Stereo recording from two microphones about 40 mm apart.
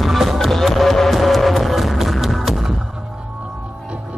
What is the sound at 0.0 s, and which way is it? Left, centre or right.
Music, centre.